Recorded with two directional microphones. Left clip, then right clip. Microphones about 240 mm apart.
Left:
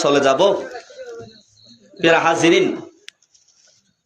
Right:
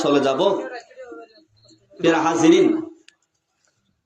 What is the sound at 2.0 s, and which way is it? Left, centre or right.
Speech, centre.